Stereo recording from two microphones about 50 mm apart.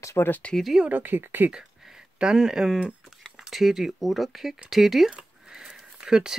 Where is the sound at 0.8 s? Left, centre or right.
Right.